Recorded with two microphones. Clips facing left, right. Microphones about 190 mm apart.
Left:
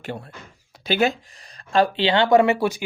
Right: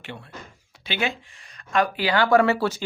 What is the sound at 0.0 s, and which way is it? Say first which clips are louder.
Speech: left 5 dB; 40° left (ahead or behind).